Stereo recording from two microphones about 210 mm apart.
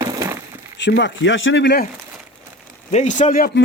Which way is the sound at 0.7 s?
55° left (ahead or behind).